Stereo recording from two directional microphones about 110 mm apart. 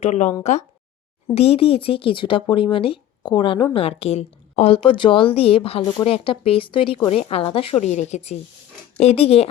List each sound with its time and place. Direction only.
0.0 s speech: 90° left
1.4 s speech: 65° left (ahead or behind)
7.1 s speech: 75° left (ahead or behind)
9.0 s speech: 70° left (ahead or behind)